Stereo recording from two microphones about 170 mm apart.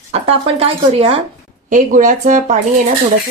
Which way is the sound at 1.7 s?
50° right (ahead or behind).